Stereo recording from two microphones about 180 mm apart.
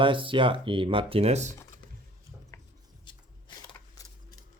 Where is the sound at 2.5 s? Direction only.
20° left (ahead or behind).